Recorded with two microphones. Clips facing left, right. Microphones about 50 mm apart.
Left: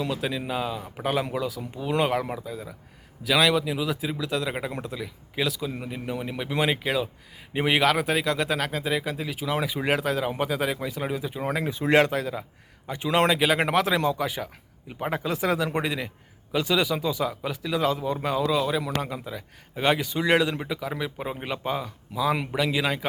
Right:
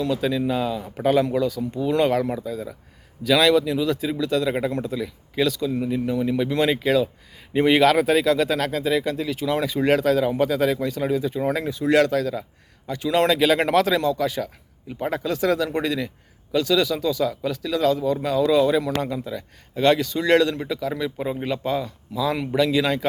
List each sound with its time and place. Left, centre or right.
0.0 s speech: centre
14.0 s speech: left
18.4 s speech: centre